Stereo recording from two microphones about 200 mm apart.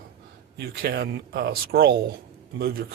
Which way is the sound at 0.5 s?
55° right (ahead or behind).